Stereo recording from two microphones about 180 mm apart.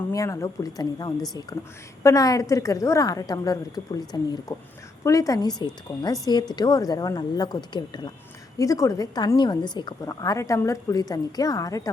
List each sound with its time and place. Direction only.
0.1 s a woman's voice: 20° left (ahead or behind)